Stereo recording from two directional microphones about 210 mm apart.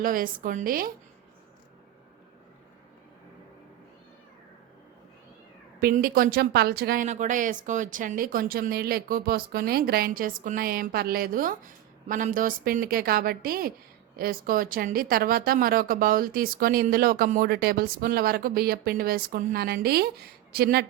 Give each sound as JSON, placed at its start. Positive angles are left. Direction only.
{"t": 0.0, "sound": "a woman's voice", "side_deg": -40}
{"t": 5.8, "sound": "speech", "side_deg": -45}